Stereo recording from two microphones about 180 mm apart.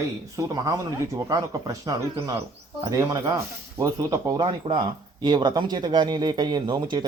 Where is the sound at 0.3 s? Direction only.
20° right (ahead or behind).